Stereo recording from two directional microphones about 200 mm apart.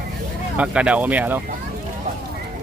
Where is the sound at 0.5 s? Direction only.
5° right (ahead or behind).